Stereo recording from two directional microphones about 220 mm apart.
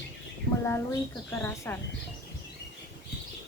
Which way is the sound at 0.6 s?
10° left (ahead or behind).